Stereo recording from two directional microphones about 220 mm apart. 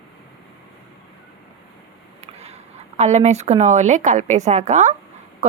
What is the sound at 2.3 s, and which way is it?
A woman's voice, 30° right (ahead or behind).